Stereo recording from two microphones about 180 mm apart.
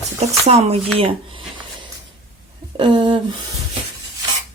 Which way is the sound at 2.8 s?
25° right (ahead or behind).